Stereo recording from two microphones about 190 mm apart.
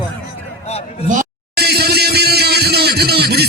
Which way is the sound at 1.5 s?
55° right (ahead or behind).